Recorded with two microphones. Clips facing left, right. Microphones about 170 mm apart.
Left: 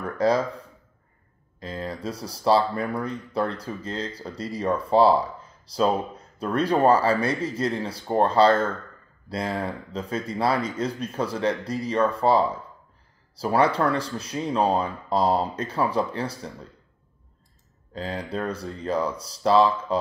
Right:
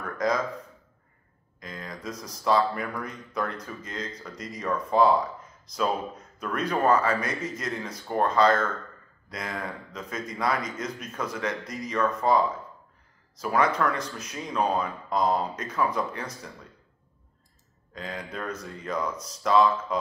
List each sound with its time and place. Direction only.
0.0 s speech: 30° left (ahead or behind)
17.9 s speech: 30° left (ahead or behind)